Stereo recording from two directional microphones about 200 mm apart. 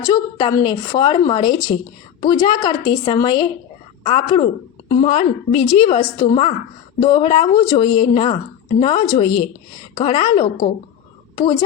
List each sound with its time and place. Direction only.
0.0 s a woman's voice: 20° left (ahead or behind)